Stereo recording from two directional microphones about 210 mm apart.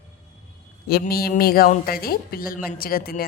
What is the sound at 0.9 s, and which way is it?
A woman's voice, 45° left (ahead or behind).